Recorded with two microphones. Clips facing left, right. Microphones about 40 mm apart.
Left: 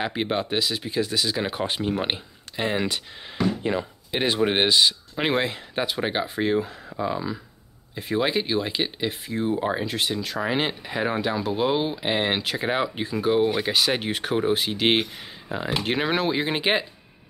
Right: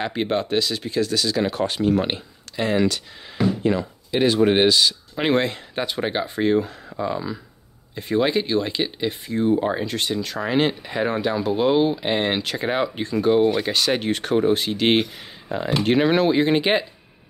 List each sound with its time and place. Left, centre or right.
0.0 s speech: centre
5.1 s speech: centre